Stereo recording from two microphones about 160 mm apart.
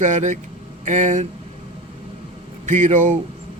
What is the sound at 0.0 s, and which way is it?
Speech, 50° right (ahead or behind).